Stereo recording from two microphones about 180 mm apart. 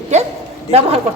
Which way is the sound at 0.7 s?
35° right (ahead or behind).